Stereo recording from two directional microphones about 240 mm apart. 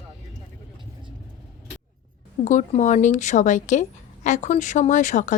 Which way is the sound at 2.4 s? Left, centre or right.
Left.